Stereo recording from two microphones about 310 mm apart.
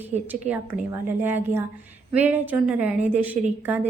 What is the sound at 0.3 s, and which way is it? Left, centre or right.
A woman's voice, centre.